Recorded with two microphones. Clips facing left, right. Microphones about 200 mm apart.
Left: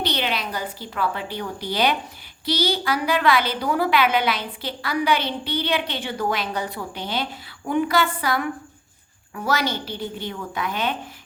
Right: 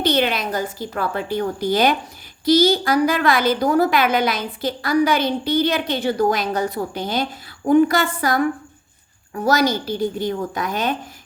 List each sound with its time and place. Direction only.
0.0 s a woman's voice: 45° right (ahead or behind)